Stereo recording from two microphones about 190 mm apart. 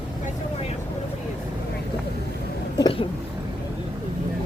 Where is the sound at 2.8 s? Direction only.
30° left (ahead or behind).